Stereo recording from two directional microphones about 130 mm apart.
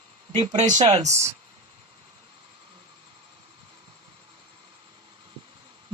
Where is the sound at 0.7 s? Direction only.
60° right (ahead or behind).